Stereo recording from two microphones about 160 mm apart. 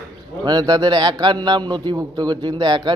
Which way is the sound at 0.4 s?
25° right (ahead or behind).